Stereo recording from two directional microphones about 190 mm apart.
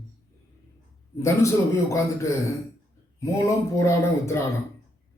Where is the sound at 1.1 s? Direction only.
15° left (ahead or behind).